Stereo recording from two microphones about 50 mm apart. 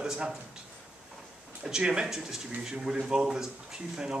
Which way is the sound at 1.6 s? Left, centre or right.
Centre.